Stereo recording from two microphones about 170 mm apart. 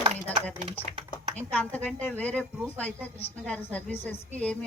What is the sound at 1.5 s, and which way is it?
A woman's voice, 10° left (ahead or behind).